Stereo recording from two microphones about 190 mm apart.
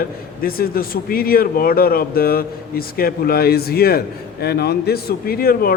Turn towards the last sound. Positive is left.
turn(degrees=50)  # may be behind; listen again after turning